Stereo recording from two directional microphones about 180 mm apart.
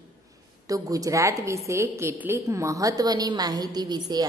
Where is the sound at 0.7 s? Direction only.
20° right (ahead or behind).